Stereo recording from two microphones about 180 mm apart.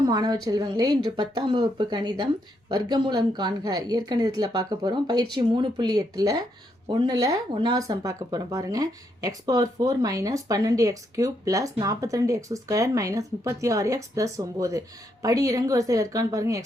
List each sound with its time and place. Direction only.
0.0 s a woman's voice: 20° right (ahead or behind)